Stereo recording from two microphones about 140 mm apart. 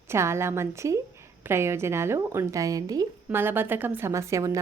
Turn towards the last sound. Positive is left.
turn(degrees=-20)  # may be behind; listen again after turning